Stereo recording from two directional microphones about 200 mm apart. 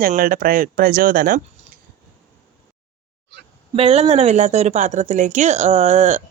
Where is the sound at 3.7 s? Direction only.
30° right (ahead or behind).